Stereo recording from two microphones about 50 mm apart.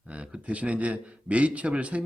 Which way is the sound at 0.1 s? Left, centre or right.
Right.